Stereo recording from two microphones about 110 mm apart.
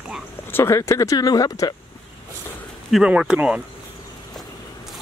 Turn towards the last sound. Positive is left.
turn(degrees=-10)  # may be behind; listen again after turning